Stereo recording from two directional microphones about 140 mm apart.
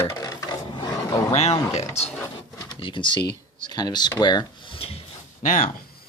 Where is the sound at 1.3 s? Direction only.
50° left (ahead or behind).